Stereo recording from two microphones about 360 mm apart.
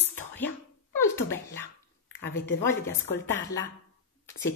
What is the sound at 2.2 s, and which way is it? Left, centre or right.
Speech, left.